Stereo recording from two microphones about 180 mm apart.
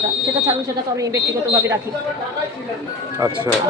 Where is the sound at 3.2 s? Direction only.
15° right (ahead or behind).